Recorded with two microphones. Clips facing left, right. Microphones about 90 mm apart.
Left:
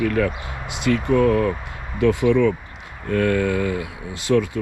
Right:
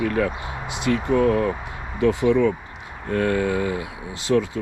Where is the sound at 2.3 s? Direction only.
15° right (ahead or behind).